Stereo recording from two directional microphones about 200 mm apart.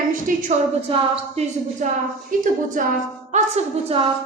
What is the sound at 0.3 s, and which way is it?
Speech, 40° right (ahead or behind).